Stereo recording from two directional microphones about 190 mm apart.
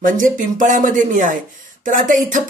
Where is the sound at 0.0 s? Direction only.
45° right (ahead or behind).